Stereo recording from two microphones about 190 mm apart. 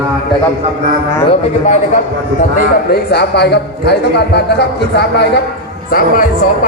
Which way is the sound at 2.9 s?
60° left (ahead or behind).